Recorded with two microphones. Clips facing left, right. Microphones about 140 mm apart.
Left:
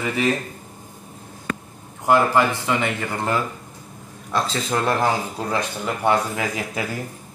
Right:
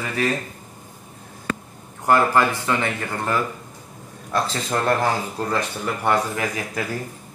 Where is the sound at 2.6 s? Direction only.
15° left (ahead or behind).